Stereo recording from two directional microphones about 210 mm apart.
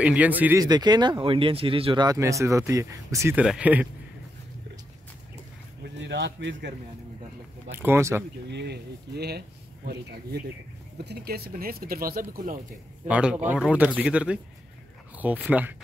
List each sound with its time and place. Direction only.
0.0 s speech: 5° right (ahead or behind)
5.9 s speech: 55° right (ahead or behind)
7.8 s speech: 10° right (ahead or behind)
8.5 s speech: 55° right (ahead or behind)
11.0 s speech: 50° right (ahead or behind)
13.1 s speech: 5° right (ahead or behind)